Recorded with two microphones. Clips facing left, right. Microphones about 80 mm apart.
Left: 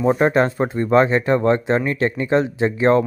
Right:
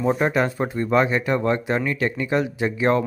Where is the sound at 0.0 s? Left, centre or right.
Left.